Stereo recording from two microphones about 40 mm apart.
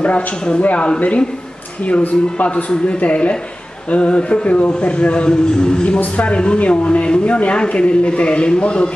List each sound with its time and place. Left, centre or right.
0.0 s speech: left
5.9 s speech: left
6.3 s speech: left